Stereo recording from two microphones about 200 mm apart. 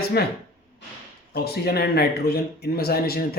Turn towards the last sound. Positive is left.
turn(degrees=50)  # may be behind; listen again after turning